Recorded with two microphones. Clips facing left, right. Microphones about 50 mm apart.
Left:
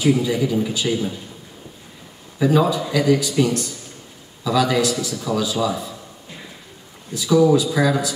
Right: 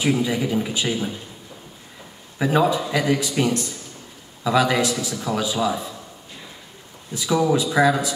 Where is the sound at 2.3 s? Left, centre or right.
Right.